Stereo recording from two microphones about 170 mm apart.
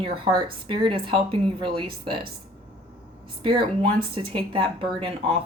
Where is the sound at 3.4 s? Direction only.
30° right (ahead or behind).